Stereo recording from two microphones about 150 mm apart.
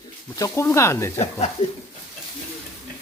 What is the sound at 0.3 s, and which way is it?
Speech, 20° left (ahead or behind).